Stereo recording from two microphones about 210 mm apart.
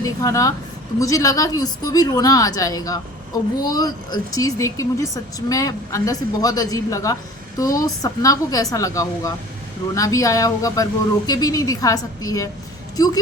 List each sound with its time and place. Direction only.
0.0 s a woman's voice: 15° left (ahead or behind)